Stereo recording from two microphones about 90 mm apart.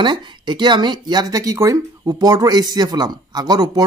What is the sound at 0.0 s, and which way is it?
Speech, 60° right (ahead or behind).